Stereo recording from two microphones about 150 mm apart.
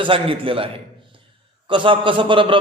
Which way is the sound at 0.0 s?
35° right (ahead or behind).